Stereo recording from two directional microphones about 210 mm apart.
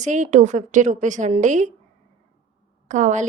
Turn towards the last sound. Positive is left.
turn(degrees=-35)  # may be behind; listen again after turning